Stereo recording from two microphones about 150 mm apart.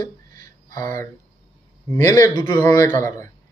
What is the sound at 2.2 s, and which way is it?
Speech, 25° left (ahead or behind).